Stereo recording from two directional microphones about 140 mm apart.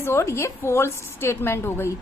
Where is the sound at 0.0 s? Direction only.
20° left (ahead or behind).